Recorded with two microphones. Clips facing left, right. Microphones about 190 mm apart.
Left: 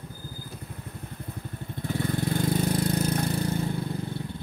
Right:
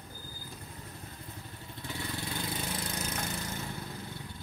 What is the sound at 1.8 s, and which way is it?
Lawn mower, 50° left (ahead or behind).